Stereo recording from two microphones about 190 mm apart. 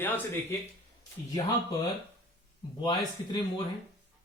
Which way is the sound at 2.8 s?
25° left (ahead or behind).